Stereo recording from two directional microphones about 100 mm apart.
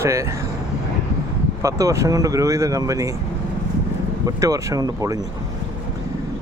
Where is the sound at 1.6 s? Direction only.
30° right (ahead or behind).